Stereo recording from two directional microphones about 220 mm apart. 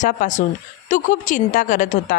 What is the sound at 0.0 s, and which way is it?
A woman's voice, 35° left (ahead or behind).